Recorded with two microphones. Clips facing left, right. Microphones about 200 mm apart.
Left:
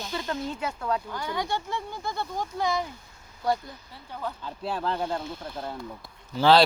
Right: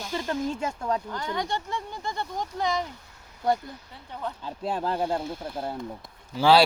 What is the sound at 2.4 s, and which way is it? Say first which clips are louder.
Speech: even; 15° right (ahead or behind).